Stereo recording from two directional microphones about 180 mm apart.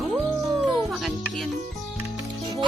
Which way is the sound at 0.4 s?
Centre (ahead or behind).